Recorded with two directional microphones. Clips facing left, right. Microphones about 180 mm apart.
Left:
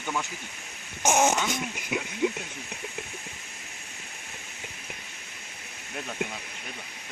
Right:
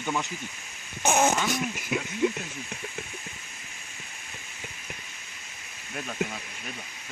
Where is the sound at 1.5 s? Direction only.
20° left (ahead or behind).